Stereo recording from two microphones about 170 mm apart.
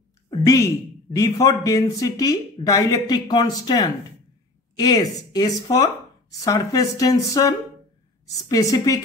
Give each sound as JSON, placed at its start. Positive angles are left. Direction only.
{"t": 0.3, "sound": "a woman's voice", "side_deg": 20}